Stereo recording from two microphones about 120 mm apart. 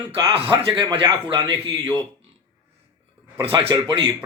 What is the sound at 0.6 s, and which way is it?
Speech, 40° right (ahead or behind).